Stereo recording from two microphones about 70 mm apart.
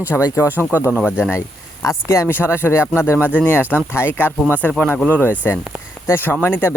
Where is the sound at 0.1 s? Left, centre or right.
Left.